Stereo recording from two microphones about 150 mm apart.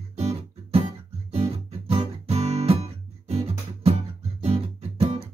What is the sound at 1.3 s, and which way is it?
Music, 40° right (ahead or behind).